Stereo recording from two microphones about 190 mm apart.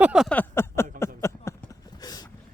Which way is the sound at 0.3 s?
15° left (ahead or behind).